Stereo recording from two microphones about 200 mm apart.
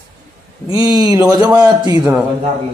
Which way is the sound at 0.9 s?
20° right (ahead or behind).